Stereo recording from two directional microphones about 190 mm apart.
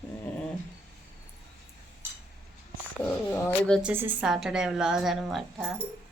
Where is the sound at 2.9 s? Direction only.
10° left (ahead or behind).